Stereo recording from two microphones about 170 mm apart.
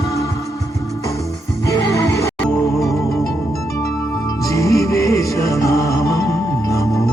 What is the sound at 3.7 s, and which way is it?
Music, 20° left (ahead or behind).